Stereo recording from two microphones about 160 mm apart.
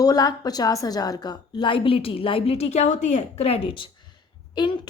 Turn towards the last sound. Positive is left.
turn(degrees=30)  # may be behind; listen again after turning